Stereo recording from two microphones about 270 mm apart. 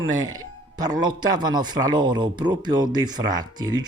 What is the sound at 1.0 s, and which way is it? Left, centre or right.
Speech, centre.